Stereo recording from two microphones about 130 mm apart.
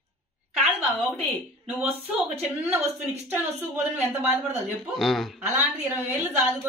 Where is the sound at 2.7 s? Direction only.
15° right (ahead or behind).